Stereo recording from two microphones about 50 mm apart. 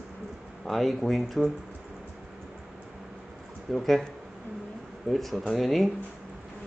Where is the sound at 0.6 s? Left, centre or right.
Centre.